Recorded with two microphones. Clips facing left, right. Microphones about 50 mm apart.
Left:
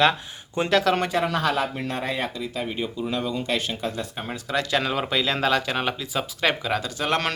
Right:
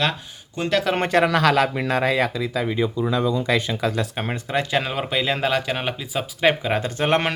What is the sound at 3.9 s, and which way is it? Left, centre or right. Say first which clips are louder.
Speech: right 6 dB; right.